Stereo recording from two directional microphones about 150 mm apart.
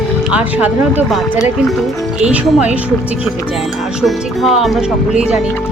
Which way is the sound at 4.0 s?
Centre (ahead or behind).